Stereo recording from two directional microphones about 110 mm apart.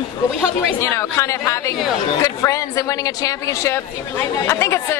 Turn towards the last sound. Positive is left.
turn(degrees=25)  # may be behind; listen again after turning